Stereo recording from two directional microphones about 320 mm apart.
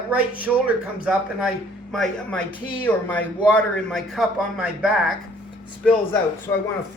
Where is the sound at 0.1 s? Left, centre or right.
Centre.